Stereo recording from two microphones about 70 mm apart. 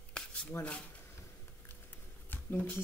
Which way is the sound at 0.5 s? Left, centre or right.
Left.